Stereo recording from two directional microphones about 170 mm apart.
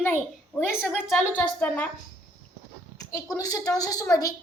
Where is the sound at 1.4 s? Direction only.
10° left (ahead or behind).